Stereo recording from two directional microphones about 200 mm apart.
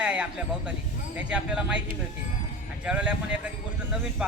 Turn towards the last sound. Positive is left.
turn(degrees=-5)  # may be behind; listen again after turning